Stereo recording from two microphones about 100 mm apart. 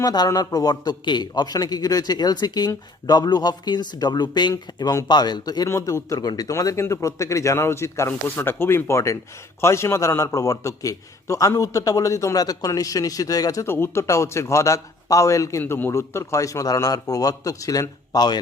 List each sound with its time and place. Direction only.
0.0 s a man's voice: 40° left (ahead or behind)
4.5 s a man's voice: 35° left (ahead or behind)
5.6 s a man's voice: 30° left (ahead or behind)
15.6 s a man's voice: 20° left (ahead or behind)
15.9 s a man's voice: 30° left (ahead or behind)